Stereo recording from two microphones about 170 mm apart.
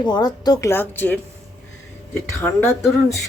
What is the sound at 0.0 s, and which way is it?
Speech, 25° left (ahead or behind).